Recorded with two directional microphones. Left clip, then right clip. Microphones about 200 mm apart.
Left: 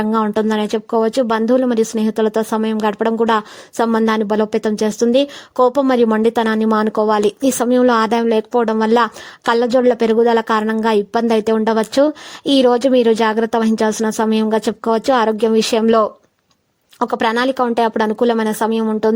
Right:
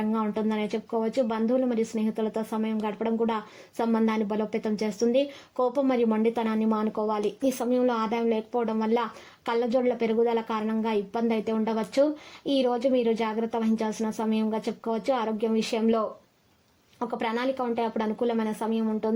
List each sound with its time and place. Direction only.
0.0 s speech: 40° left (ahead or behind)